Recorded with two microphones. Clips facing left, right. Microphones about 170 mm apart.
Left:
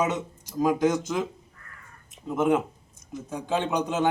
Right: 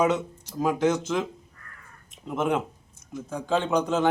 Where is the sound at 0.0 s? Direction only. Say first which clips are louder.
Right 3 dB; 15° left (ahead or behind).